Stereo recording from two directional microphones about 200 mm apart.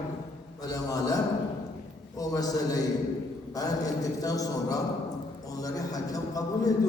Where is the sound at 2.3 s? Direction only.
20° left (ahead or behind).